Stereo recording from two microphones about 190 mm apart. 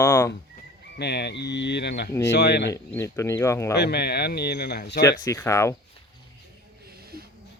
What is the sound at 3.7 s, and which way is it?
Speech, 60° left (ahead or behind).